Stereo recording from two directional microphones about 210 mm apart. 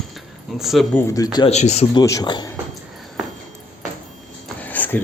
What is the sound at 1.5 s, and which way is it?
Speech, 30° left (ahead or behind).